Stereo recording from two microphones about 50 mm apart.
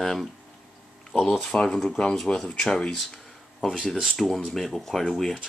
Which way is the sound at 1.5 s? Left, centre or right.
Centre.